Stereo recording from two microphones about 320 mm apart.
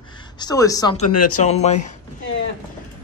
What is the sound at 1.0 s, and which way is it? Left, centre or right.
Speech, left.